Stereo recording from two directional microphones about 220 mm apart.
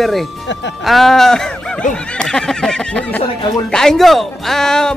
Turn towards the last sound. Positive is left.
turn(degrees=5)  # may be behind; listen again after turning